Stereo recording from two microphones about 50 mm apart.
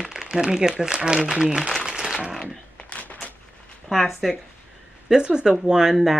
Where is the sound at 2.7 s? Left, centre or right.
Left.